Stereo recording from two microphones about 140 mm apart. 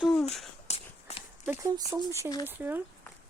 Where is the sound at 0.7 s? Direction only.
50° left (ahead or behind).